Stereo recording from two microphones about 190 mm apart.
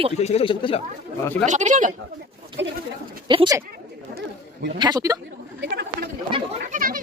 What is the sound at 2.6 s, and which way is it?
Speech, 70° right (ahead or behind).